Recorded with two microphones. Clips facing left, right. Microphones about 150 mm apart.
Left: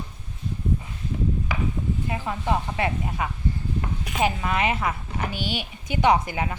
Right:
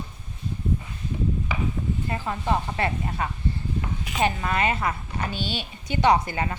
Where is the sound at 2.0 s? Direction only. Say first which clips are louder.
Right 1 dB; 10° left (ahead or behind).